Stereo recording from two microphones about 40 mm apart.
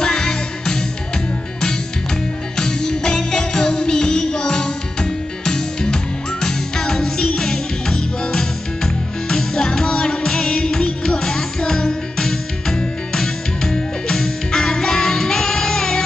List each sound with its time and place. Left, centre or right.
0.0 s music: centre
2.5 s music: centre